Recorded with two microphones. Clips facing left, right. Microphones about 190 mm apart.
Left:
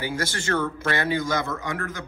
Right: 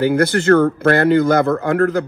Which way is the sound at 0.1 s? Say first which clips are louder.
Right 14 dB; 60° right (ahead or behind).